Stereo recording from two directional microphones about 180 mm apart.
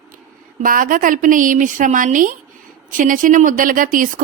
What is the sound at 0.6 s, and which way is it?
A woman's voice, 50° right (ahead or behind).